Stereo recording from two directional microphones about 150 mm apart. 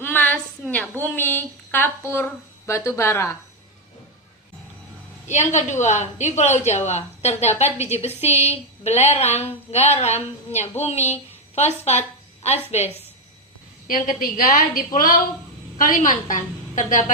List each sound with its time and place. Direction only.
0.0 s a sound: 10° left (ahead or behind)
0.7 s speech: 10° left (ahead or behind)
5.3 s a woman's voice: 50° left (ahead or behind)
13.8 s a woman's voice: 70° left (ahead or behind)